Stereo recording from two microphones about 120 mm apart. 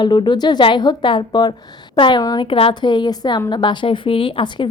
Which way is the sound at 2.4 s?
45° left (ahead or behind).